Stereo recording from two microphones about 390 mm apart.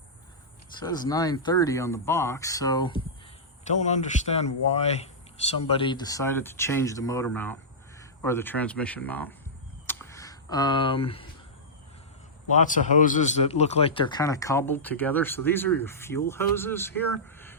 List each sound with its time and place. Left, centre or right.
0.8 s a man's voice: centre
9.8 s a sound: centre
12.5 s a man's voice: centre